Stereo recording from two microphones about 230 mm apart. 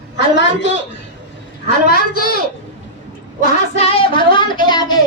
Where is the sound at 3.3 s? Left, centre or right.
Left.